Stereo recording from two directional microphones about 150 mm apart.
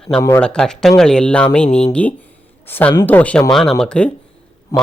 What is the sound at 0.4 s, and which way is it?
A woman's voice, 5° left (ahead or behind).